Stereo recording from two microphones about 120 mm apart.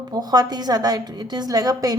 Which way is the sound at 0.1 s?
35° right (ahead or behind).